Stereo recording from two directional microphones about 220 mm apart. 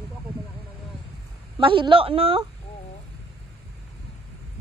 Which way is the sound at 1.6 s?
25° right (ahead or behind).